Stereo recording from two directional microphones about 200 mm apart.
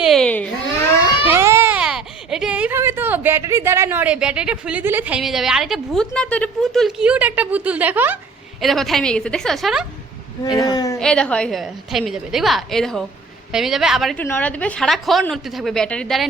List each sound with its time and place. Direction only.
0.0 s baby cry: centre (ahead or behind)
1.2 s a child's voice: 10° right (ahead or behind)
10.7 s a woman's voice: 20° left (ahead or behind)
11.0 s a woman's voice: 5° left (ahead or behind)